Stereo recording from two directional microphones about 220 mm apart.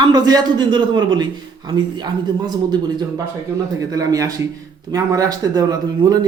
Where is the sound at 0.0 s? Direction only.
20° right (ahead or behind).